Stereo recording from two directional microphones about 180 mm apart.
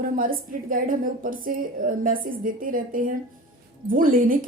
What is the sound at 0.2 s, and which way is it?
A woman's voice, 50° right (ahead or behind).